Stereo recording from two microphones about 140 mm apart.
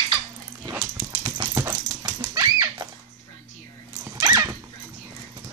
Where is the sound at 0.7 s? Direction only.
35° right (ahead or behind).